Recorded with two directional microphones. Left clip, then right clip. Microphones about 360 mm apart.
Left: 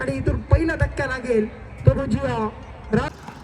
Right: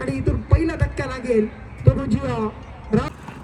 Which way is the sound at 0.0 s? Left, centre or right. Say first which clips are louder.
Even; centre.